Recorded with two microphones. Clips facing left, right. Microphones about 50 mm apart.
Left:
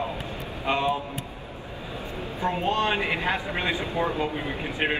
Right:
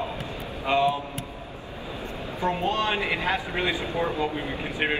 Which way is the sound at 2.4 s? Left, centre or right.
Left.